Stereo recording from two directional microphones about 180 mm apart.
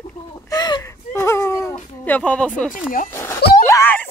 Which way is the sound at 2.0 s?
10° left (ahead or behind).